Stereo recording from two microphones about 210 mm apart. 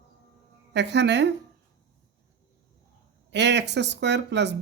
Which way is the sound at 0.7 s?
55° right (ahead or behind).